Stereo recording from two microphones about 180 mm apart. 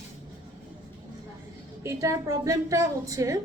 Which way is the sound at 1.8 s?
15° right (ahead or behind).